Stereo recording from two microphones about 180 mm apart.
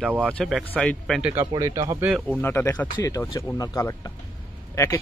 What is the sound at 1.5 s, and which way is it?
Speech, 20° right (ahead or behind).